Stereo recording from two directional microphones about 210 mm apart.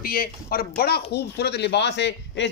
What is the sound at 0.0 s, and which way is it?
A man's voice, 45° left (ahead or behind).